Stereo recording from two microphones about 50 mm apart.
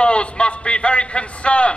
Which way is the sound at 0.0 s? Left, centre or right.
Left.